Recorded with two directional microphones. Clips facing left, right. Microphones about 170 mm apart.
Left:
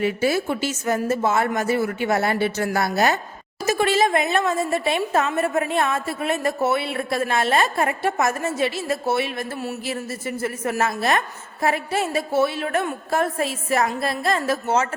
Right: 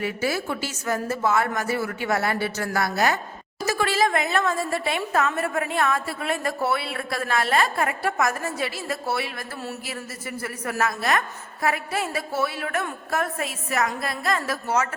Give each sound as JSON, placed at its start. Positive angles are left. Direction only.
{"t": 0.0, "sound": "a woman's voice", "side_deg": 25}